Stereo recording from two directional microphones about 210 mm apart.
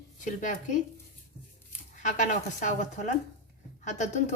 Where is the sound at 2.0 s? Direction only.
35° left (ahead or behind).